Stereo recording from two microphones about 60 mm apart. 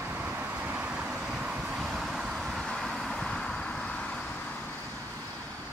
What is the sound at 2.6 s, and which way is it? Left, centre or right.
Vehicle, centre.